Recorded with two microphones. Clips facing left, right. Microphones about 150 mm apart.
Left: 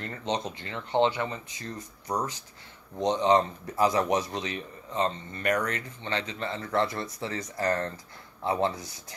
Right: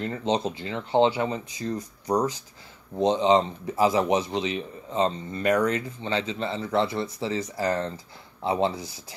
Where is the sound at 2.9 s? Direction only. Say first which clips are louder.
Right 3 dB; 30° right (ahead or behind).